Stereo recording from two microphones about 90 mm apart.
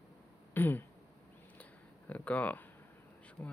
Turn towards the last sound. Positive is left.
turn(degrees=25)  # may be behind; listen again after turning